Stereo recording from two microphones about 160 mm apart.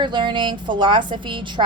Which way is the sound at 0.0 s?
30° right (ahead or behind).